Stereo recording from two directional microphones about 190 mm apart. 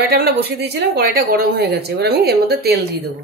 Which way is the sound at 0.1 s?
60° right (ahead or behind).